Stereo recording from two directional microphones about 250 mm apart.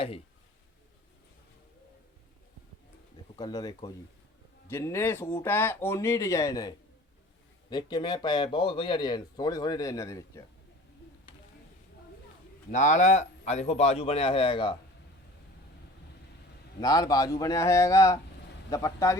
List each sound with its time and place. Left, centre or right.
3.3 s speech: centre
12.7 s speech: left
16.8 s speech: centre